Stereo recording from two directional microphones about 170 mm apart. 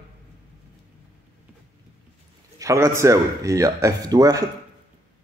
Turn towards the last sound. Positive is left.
turn(degrees=-20)  # may be behind; listen again after turning